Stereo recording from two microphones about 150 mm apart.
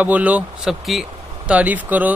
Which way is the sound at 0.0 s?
10° right (ahead or behind).